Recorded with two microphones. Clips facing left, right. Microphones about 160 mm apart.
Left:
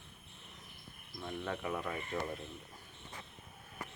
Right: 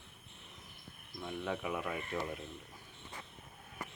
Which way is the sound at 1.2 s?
5° right (ahead or behind).